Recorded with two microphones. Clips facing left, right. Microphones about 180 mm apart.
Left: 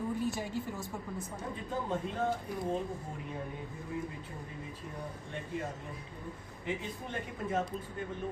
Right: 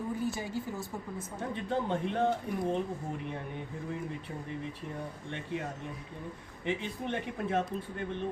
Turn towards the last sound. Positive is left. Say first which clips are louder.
# right 3 dB
turn(degrees=-70)  # may be behind; listen again after turning